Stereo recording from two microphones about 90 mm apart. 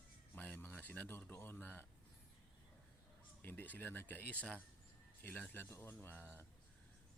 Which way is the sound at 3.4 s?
20° left (ahead or behind).